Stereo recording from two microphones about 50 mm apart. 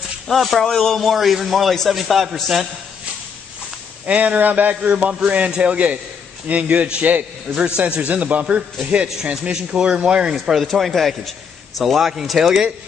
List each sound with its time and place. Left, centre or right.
0.3 s a man's voice: centre
4.0 s a man's voice: right
10.3 s a man's voice: centre